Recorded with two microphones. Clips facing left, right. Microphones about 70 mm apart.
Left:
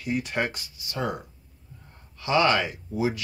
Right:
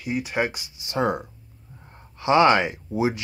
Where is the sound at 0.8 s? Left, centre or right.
Right.